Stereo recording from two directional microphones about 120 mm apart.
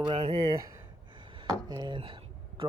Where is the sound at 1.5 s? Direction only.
35° right (ahead or behind).